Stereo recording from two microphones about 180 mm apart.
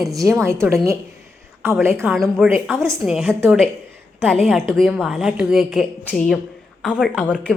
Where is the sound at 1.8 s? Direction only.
15° right (ahead or behind).